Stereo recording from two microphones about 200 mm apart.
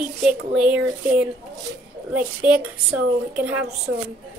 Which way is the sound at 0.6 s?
5° right (ahead or behind).